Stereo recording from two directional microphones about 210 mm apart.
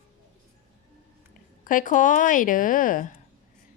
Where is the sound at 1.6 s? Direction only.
40° left (ahead or behind).